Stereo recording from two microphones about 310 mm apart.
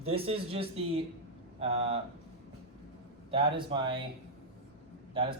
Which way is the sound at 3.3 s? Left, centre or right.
Centre.